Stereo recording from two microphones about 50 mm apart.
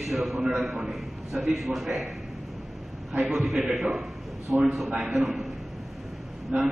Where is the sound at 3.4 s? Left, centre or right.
Centre.